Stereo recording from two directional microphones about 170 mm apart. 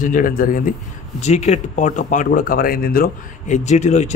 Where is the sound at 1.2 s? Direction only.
40° left (ahead or behind).